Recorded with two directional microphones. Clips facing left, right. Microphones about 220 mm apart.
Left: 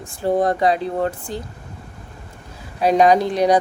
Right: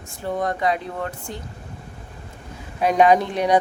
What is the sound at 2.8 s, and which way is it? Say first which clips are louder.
Speech: left 2 dB; 35° left (ahead or behind).